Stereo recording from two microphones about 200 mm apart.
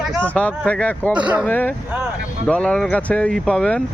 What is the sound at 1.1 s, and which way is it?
Speech, 5° right (ahead or behind).